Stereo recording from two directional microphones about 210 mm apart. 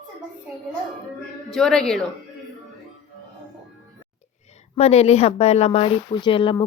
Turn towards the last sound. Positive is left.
turn(degrees=25)  # may be behind; listen again after turning